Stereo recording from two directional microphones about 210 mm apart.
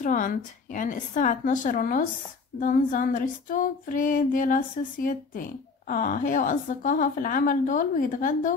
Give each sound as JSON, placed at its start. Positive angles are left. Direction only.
{"t": 0.0, "sound": "female singing", "side_deg": 40}